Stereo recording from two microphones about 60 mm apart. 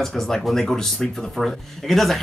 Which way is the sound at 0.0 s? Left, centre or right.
Centre.